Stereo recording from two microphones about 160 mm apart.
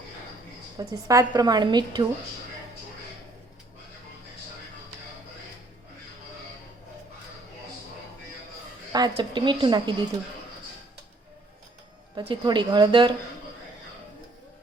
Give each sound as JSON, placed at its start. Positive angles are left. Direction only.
{"t": 0.8, "sound": "a woman's voice", "side_deg": -20}
{"t": 8.9, "sound": "a woman's voice", "side_deg": -25}
{"t": 12.1, "sound": "a woman's voice", "side_deg": -30}